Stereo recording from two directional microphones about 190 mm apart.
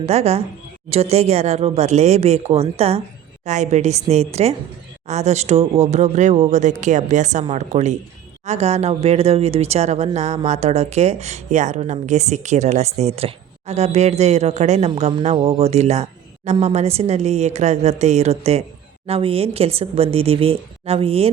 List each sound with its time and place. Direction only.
0.0 s speech: 35° right (ahead or behind)